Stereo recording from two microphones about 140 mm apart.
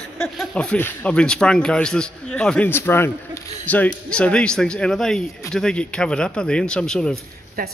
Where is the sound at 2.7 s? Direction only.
15° left (ahead or behind).